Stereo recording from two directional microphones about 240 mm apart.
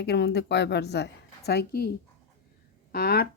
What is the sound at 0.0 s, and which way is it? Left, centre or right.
A woman's voice, left.